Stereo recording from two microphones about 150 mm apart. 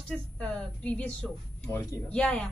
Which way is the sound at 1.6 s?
20° left (ahead or behind).